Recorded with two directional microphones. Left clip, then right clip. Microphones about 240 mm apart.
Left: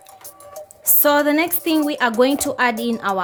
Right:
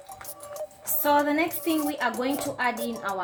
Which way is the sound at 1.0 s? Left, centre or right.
Left.